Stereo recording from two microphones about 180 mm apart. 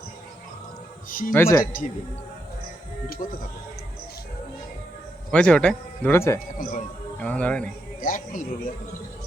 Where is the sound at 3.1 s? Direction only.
50° left (ahead or behind).